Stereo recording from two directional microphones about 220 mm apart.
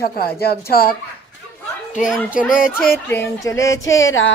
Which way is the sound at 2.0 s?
Centre (ahead or behind).